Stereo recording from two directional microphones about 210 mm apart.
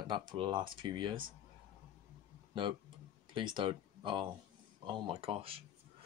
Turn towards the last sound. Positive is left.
turn(degrees=-25)  # may be behind; listen again after turning